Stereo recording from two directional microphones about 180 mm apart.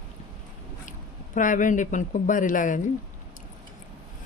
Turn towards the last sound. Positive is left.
turn(degrees=45)  # may be behind; listen again after turning